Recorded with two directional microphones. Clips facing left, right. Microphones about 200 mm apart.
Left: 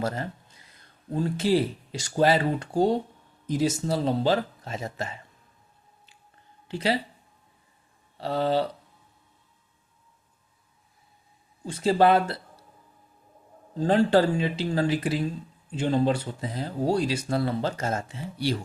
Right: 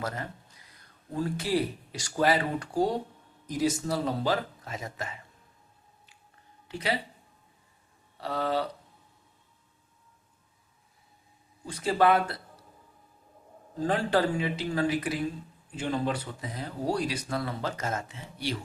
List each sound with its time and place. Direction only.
0.0 s speech: 30° left (ahead or behind)
6.7 s speech: 30° left (ahead or behind)
8.2 s speech: 30° left (ahead or behind)
11.6 s speech: 30° left (ahead or behind)
13.7 s speech: 30° left (ahead or behind)